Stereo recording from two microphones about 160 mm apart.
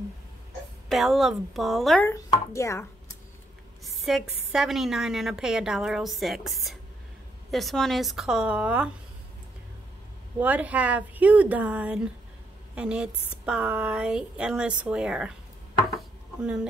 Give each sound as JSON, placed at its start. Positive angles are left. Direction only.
{"t": 0.8, "sound": "a woman's voice", "side_deg": 0}
{"t": 2.0, "sound": "speech", "side_deg": 20}
{"t": 3.8, "sound": "a woman's voice", "side_deg": 0}
{"t": 10.4, "sound": "a woman's voice", "side_deg": -10}